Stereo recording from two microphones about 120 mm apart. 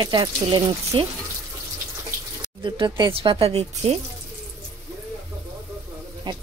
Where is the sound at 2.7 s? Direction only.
40° right (ahead or behind).